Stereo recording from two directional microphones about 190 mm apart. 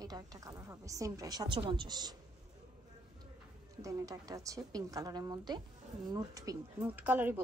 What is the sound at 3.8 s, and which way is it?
A woman's voice, 20° right (ahead or behind).